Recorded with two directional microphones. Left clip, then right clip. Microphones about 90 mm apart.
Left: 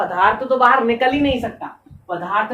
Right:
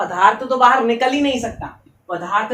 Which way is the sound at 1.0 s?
25° right (ahead or behind).